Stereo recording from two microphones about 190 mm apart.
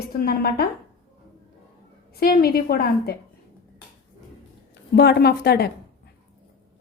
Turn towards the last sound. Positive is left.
turn(degrees=55)  # may be behind; listen again after turning